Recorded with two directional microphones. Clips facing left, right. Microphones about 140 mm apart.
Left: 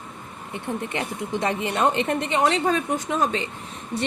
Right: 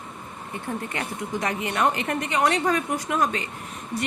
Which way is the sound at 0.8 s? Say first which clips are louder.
Left 2 dB; 25° left (ahead or behind).